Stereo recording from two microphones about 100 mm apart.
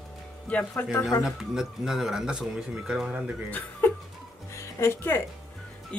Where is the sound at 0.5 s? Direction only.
15° left (ahead or behind).